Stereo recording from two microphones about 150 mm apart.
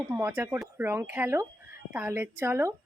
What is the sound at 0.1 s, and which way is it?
A woman's voice, 15° right (ahead or behind).